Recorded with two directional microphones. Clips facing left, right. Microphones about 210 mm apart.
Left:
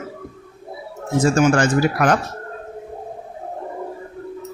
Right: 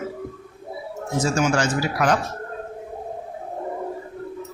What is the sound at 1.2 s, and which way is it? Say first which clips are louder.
Speech: left 6 dB; 55° left (ahead or behind).